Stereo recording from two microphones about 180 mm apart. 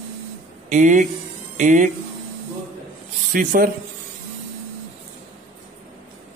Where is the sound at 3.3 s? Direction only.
50° right (ahead or behind).